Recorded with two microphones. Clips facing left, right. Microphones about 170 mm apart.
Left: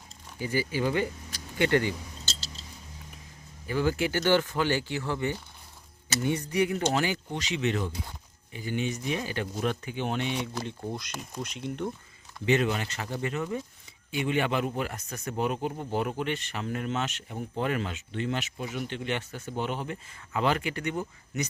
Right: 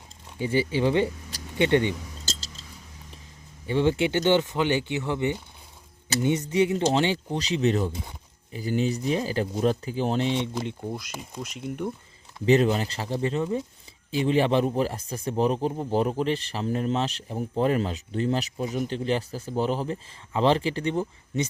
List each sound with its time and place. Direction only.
0.3 s speech: 25° right (ahead or behind)
3.7 s speech: 25° right (ahead or behind)
10.8 s speech: 5° right (ahead or behind)
12.5 s speech: 35° right (ahead or behind)